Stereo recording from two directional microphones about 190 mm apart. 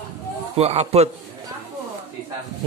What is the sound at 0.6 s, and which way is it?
Speech, 35° right (ahead or behind).